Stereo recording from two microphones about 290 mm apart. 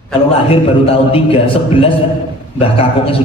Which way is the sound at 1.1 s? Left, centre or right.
Centre.